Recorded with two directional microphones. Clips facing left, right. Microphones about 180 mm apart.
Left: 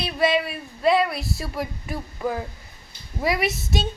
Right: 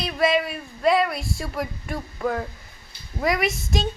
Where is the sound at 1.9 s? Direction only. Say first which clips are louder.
Right 2 dB; 5° left (ahead or behind).